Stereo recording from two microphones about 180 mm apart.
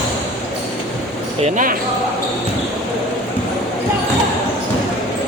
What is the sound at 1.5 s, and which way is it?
Speech, 45° right (ahead or behind).